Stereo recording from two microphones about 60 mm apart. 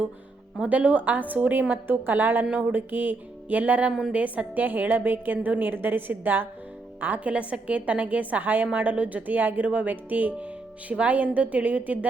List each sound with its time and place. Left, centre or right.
0.6 s a woman's voice: right